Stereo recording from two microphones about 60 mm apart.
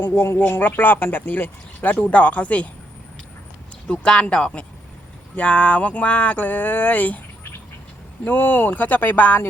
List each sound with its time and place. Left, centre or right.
0.0 s speech: left
3.8 s speech: centre
5.4 s a sound: centre
8.2 s speech: left